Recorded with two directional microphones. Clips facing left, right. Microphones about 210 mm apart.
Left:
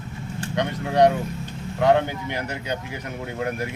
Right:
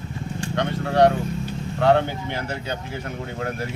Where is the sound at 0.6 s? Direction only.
15° left (ahead or behind).